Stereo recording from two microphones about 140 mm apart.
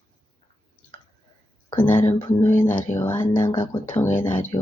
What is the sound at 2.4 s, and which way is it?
Speech, 15° left (ahead or behind).